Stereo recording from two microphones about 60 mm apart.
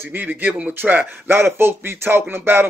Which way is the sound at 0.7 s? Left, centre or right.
Right.